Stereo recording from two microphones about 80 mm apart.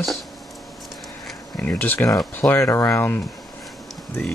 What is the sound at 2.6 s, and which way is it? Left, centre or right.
Speech, left.